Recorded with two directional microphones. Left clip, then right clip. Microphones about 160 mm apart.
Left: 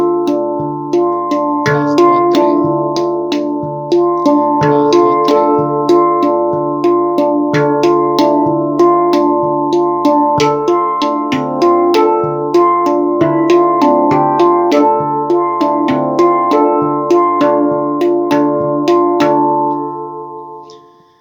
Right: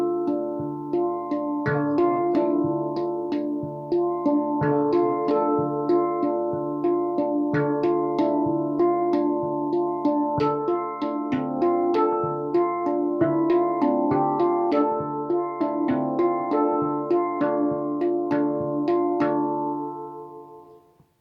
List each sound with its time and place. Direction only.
2.0 s music: 20° left (ahead or behind)
4.3 s music: 10° left (ahead or behind)